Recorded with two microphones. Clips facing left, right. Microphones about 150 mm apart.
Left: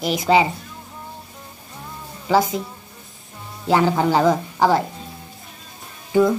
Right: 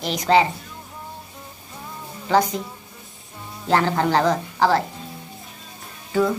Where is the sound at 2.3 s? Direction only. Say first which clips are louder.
Left 1 dB; 5° left (ahead or behind).